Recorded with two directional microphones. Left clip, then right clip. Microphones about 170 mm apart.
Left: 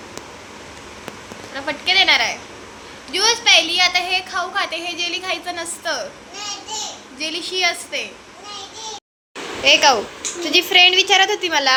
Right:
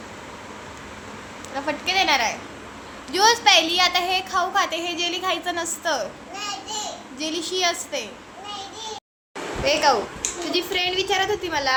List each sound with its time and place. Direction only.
1.5 s a child's voice: 15° right (ahead or behind)
7.2 s a child's voice: 20° right (ahead or behind)
9.6 s a woman's voice: 10° left (ahead or behind)